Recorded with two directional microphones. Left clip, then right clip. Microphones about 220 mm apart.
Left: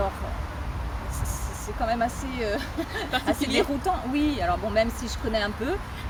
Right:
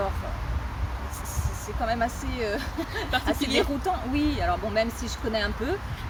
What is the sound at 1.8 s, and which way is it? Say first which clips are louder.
Speech: left 1 dB; 5° left (ahead or behind).